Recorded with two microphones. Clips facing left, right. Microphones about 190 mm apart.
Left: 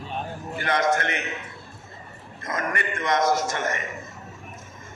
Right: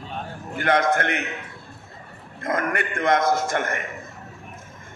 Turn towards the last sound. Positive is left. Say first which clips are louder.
# right 2 dB
turn(degrees=-55)  # may be behind; listen again after turning